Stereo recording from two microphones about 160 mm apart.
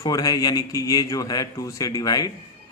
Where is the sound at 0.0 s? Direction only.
20° left (ahead or behind).